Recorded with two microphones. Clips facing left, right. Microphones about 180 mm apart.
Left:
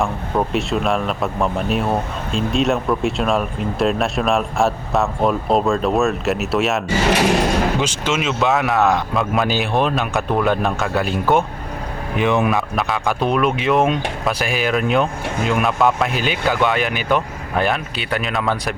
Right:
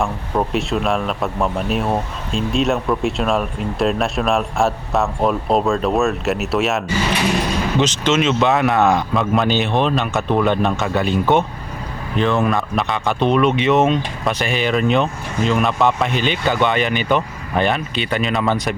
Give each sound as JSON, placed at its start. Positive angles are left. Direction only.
{"t": 0.0, "sound": "speech", "side_deg": 0}
{"t": 7.2, "sound": "speech", "side_deg": 60}
{"t": 7.8, "sound": "speech", "side_deg": 10}
{"t": 12.1, "sound": "speech", "side_deg": 15}
{"t": 12.5, "sound": "speech", "side_deg": 0}